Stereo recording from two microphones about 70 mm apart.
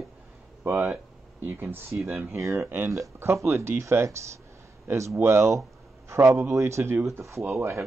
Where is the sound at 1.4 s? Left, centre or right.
Right.